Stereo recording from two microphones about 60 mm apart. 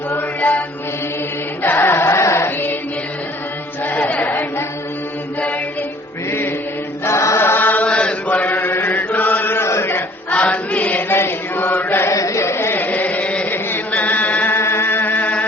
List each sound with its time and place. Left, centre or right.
1.6 s music: left
3.8 s choir: left
7.0 s choir: left
7.4 s chant: left
7.9 s chant: centre; by 9.6 s left
9.6 s a sound: left
10.2 s choir: left
11.1 s chant: left
12.1 s chant: left
12.7 s chant: left
13.5 s chant: left
14.5 s music: left